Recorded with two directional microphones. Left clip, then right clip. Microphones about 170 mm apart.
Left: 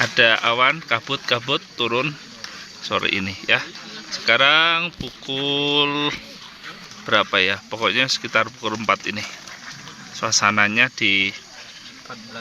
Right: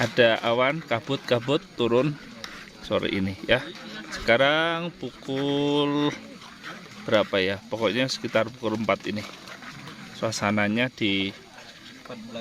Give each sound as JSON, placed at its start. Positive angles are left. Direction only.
{"t": 0.0, "sound": "speech", "side_deg": -30}